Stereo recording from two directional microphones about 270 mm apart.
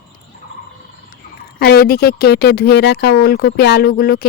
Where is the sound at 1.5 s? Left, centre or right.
Left.